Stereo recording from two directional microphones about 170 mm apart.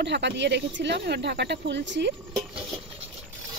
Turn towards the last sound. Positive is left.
turn(degrees=-30)  # may be behind; listen again after turning